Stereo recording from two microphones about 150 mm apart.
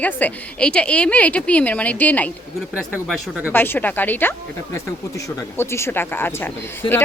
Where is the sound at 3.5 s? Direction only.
15° left (ahead or behind).